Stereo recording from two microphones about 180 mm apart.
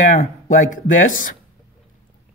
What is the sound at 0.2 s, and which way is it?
Speech, 45° left (ahead or behind).